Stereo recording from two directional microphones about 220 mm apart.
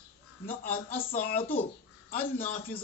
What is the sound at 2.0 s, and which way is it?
Speech, 40° left (ahead or behind).